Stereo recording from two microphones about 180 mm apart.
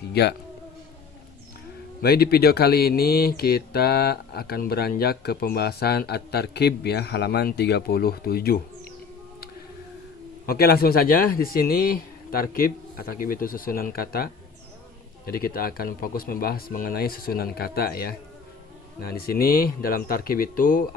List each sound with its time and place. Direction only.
0.1 s speech: 65° left (ahead or behind)
2.0 s speech: 60° left (ahead or behind)
10.4 s a man's voice: 55° left (ahead or behind)
15.3 s a man's voice: 55° left (ahead or behind)